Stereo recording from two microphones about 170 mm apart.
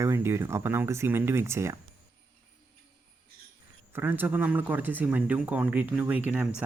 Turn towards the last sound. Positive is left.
turn(degrees=-10)  # may be behind; listen again after turning